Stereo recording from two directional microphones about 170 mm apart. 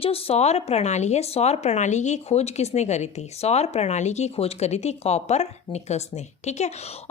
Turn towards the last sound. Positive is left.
turn(degrees=40)  # may be behind; listen again after turning